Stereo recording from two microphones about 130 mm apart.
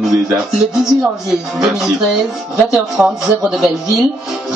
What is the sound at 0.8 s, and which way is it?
A woman's voice, 5° right (ahead or behind).